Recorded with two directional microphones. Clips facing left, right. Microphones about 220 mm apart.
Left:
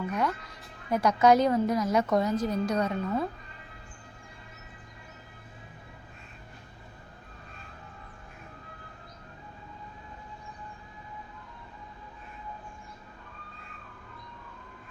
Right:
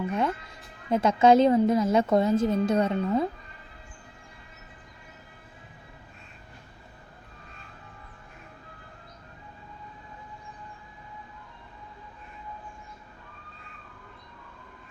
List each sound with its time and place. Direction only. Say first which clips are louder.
0.1 s speech: right 2 dB; 25° right (ahead or behind)